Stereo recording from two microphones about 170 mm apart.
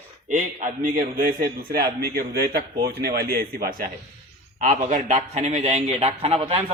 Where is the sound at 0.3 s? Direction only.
50° right (ahead or behind).